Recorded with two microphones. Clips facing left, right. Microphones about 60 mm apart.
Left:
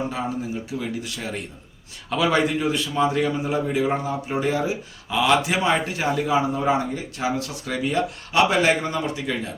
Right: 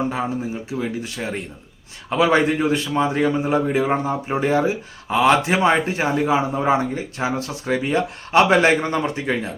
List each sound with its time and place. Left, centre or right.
0.7 s a man's voice: right